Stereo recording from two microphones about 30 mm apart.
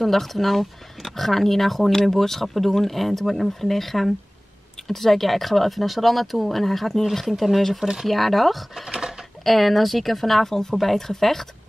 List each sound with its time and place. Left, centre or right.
0.0 s speech: centre
7.8 s speech: centre
8.1 s speech: centre
8.9 s typewriter: right
9.4 s speech: centre